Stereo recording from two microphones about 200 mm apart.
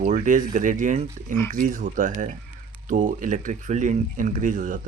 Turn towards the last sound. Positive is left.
turn(degrees=-40)  # may be behind; listen again after turning